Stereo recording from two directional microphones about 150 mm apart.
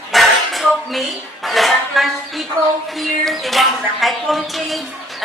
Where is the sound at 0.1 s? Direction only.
Centre (ahead or behind).